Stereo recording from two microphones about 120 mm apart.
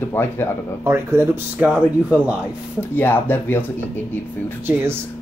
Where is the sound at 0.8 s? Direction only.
20° right (ahead or behind).